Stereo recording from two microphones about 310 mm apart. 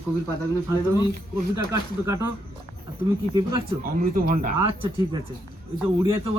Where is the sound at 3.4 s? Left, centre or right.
Centre.